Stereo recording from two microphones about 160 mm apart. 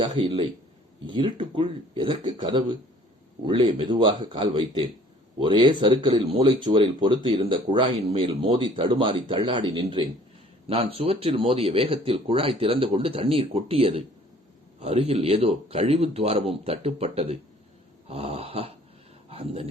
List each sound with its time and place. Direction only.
0.0 s a man's voice: 25° right (ahead or behind)